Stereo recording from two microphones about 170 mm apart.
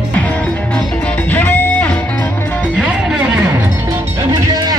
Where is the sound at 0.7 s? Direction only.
10° left (ahead or behind).